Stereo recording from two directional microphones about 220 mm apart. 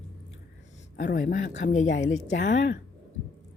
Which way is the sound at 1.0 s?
40° left (ahead or behind).